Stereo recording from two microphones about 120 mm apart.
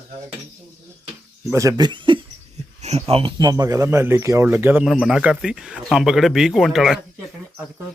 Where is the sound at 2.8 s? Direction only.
60° right (ahead or behind).